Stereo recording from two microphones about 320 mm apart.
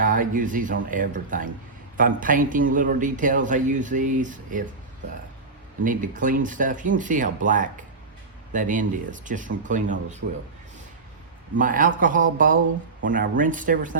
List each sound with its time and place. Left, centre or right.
0.0 s a man's voice: right
5.8 s a man's voice: right
11.5 s a man's voice: right